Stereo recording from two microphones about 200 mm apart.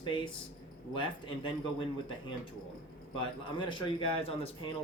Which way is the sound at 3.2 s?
25° left (ahead or behind).